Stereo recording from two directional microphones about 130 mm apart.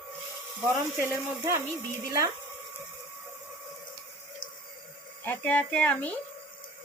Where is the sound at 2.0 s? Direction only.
25° right (ahead or behind).